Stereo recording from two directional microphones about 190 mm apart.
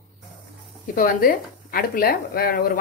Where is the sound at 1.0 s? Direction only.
45° left (ahead or behind).